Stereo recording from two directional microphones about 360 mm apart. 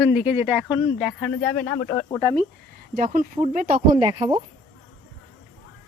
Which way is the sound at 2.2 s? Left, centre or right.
Centre.